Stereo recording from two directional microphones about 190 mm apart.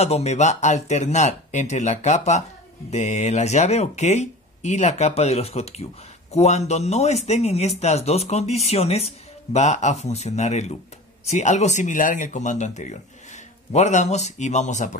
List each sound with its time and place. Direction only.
0.0 s speech: 35° left (ahead or behind)